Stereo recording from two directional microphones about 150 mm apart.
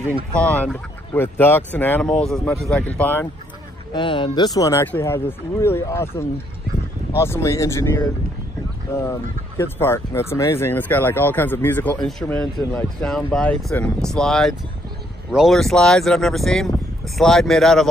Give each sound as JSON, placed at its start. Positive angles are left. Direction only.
{"t": 0.3, "sound": "speech", "side_deg": 10}
{"t": 3.9, "sound": "speech", "side_deg": 35}
{"t": 9.6, "sound": "speech", "side_deg": 15}